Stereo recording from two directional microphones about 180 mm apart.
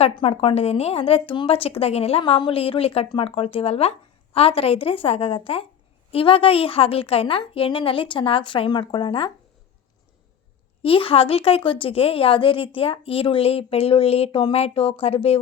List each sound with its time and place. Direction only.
0.0 s speech: 35° left (ahead or behind)
10.8 s speech: 30° left (ahead or behind)